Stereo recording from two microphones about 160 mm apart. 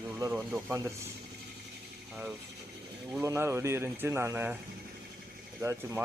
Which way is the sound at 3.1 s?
15° right (ahead or behind).